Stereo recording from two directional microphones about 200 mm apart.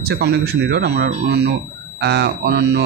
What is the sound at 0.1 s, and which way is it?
Speech, 55° right (ahead or behind).